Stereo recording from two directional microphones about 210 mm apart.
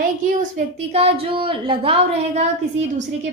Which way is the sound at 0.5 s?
30° right (ahead or behind).